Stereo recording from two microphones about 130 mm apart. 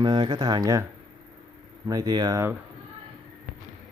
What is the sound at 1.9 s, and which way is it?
Speech, 30° right (ahead or behind).